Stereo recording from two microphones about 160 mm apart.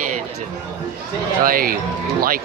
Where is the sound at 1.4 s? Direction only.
60° right (ahead or behind).